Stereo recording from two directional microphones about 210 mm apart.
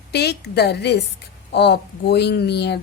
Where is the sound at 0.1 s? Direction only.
50° left (ahead or behind).